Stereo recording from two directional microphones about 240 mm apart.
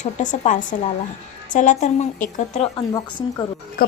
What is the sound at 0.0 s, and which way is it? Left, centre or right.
A woman's voice, left.